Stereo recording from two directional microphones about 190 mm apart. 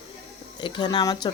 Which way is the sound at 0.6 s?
25° left (ahead or behind).